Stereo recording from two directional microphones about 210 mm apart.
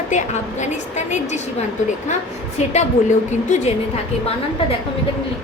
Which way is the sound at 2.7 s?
35° left (ahead or behind).